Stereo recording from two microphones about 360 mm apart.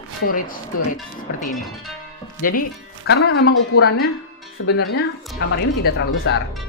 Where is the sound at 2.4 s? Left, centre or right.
Left.